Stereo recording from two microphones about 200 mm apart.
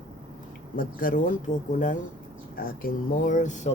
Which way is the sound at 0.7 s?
45° left (ahead or behind).